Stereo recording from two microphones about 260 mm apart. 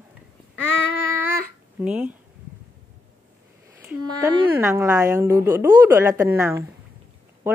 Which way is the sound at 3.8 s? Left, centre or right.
Centre.